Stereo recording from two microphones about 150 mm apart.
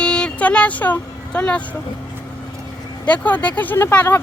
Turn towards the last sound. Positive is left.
turn(degrees=15)  # may be behind; listen again after turning